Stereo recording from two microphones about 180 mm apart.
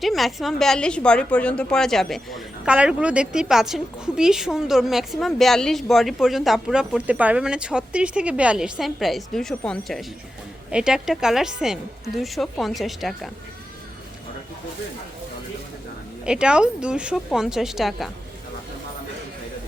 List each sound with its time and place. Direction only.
0.0 s a woman's voice: centre (ahead or behind)
16.2 s a woman's voice: 5° right (ahead or behind)